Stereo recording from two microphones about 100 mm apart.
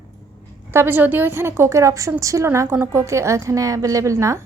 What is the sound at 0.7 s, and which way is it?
A woman's voice, 20° right (ahead or behind).